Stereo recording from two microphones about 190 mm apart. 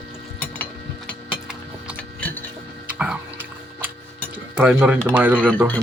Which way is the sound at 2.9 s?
10° right (ahead or behind).